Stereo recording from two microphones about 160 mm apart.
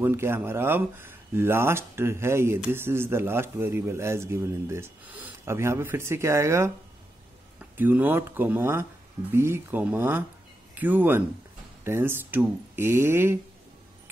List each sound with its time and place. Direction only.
0.0 s speech: 15° right (ahead or behind)
7.7 s speech: 10° right (ahead or behind)